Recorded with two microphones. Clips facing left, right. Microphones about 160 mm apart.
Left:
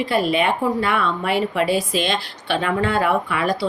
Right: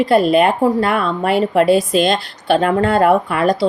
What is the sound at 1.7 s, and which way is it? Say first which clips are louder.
Speech: right 7 dB; centre (ahead or behind).